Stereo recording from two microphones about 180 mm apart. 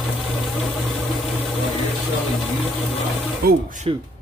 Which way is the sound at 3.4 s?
60° right (ahead or behind).